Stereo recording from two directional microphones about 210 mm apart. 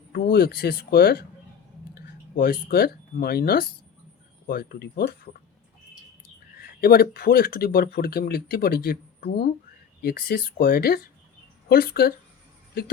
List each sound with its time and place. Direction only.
0.1 s speech: 45° left (ahead or behind)
6.6 s speech: 45° left (ahead or behind)